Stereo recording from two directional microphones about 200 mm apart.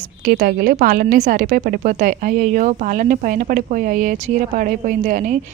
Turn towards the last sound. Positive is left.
turn(degrees=-40)  # may be behind; listen again after turning